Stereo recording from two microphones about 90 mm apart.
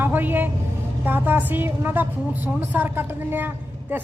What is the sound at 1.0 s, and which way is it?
A woman's voice, 25° right (ahead or behind).